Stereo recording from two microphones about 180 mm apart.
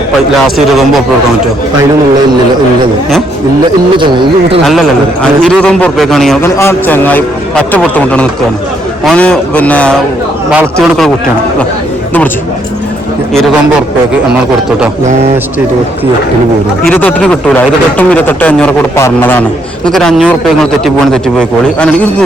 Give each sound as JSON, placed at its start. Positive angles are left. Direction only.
{"t": 3.9, "sound": "speech", "side_deg": -25}
{"t": 5.4, "sound": "a man's voice", "side_deg": 5}
{"t": 6.4, "sound": "a man's voice", "side_deg": 15}
{"t": 16.9, "sound": "a man's voice", "side_deg": 10}